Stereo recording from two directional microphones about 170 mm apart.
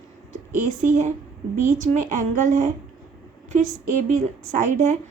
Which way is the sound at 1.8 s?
45° right (ahead or behind).